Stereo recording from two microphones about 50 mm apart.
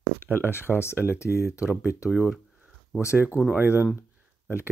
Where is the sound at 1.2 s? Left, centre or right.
Left.